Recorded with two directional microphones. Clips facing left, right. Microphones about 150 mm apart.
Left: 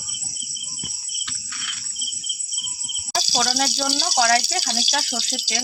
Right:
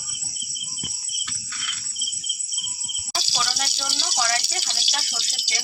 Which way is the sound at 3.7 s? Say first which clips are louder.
Left 8 dB; 40° left (ahead or behind).